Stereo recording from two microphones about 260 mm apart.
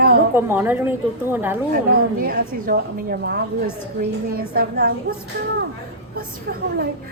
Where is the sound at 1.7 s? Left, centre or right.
Right.